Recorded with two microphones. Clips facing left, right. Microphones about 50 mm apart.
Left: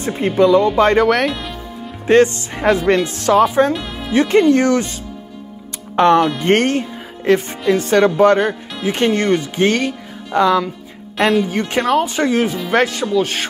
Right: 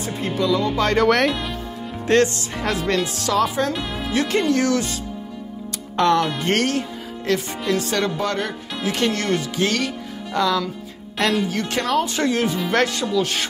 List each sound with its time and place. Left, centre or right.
0.0 s speech: left
0.9 s speech: centre
2.0 s speech: centre
3.7 s speech: centre
4.1 s speech: centre
5.9 s speech: left
8.8 s speech: left
11.1 s speech: centre